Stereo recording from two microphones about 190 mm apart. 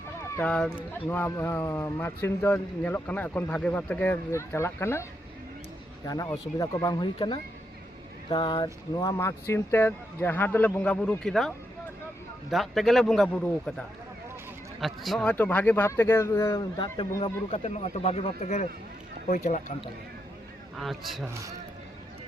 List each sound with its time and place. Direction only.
0.3 s speech: 5° left (ahead or behind)
6.6 s speech: 20° left (ahead or behind)
17.6 s speech: 35° left (ahead or behind)
20.7 s speech: centre (ahead or behind)